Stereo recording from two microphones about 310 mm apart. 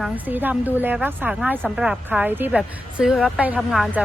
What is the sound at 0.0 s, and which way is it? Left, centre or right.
A woman's voice, centre.